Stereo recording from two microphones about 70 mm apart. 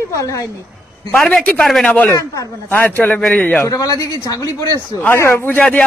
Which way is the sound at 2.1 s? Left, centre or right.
Left.